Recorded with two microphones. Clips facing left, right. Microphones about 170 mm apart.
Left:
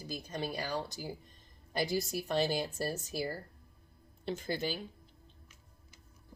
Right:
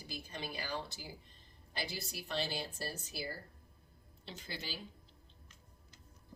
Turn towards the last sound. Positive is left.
turn(degrees=50)  # may be behind; listen again after turning